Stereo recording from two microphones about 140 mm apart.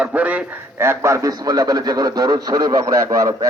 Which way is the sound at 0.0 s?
10° right (ahead or behind).